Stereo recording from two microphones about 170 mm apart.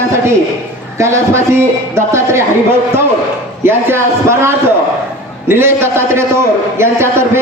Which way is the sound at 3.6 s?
15° right (ahead or behind).